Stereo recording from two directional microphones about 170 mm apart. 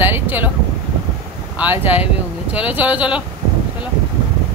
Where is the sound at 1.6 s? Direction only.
10° right (ahead or behind).